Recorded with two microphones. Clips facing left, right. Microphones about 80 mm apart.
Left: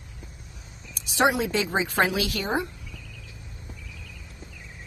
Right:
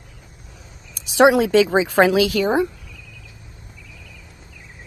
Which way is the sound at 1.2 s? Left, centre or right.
Right.